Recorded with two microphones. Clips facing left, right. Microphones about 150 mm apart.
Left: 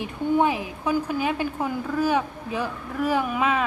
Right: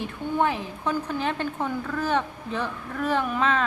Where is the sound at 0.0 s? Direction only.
15° left (ahead or behind).